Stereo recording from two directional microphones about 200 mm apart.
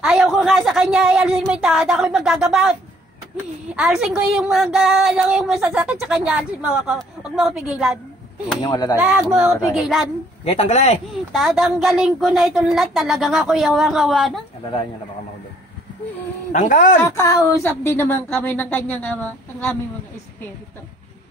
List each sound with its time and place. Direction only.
0.0 s a woman's voice: centre (ahead or behind)
3.7 s a woman's voice: 5° right (ahead or behind)
8.5 s speech: 20° left (ahead or behind)
8.9 s a woman's voice: 5° right (ahead or behind)
10.4 s speech: 30° left (ahead or behind)
11.3 s a woman's voice: centre (ahead or behind)
16.5 s speech: 40° left (ahead or behind)
17.0 s a woman's voice: 15° left (ahead or behind)